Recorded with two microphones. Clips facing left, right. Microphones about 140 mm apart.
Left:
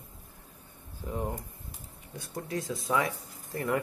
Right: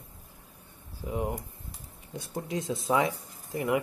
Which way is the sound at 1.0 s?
10° right (ahead or behind).